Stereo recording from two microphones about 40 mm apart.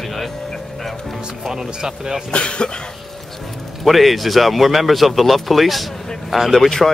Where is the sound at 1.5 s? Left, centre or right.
Centre.